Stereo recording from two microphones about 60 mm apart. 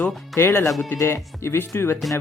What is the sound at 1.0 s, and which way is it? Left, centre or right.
Speech, left.